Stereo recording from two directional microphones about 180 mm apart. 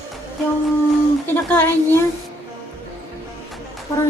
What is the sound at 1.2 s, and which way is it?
Speech, 10° left (ahead or behind).